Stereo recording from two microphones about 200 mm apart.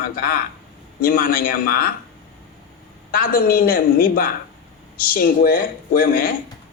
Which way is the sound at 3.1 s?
45° left (ahead or behind).